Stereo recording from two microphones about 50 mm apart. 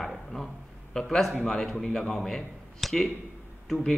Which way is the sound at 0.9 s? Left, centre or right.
Centre.